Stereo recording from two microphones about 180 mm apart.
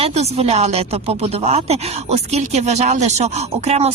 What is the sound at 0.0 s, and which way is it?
Speech, 35° right (ahead or behind).